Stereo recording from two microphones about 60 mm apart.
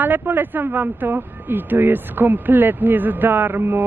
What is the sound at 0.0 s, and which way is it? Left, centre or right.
Speech, right.